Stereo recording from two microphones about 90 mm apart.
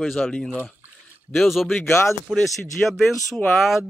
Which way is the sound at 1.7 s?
30° left (ahead or behind).